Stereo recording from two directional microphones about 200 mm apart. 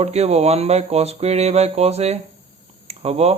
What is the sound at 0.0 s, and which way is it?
Speech, 35° right (ahead or behind).